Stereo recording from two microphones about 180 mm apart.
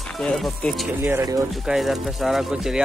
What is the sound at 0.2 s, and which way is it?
Speech, 5° left (ahead or behind).